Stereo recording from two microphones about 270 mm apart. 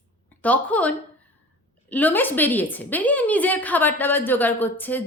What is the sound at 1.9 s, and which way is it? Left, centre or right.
A woman's voice, centre.